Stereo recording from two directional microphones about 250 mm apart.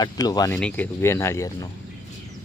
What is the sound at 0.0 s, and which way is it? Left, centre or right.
Speech, centre.